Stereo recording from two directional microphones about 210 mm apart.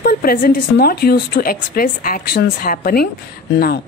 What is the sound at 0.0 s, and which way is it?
Speech, 45° left (ahead or behind).